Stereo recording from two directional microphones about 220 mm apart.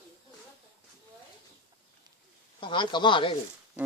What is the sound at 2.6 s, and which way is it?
Speech, 20° left (ahead or behind).